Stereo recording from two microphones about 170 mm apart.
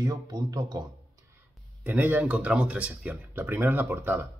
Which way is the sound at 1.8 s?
10° right (ahead or behind).